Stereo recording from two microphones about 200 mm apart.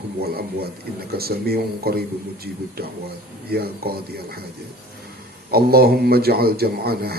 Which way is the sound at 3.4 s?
50° right (ahead or behind).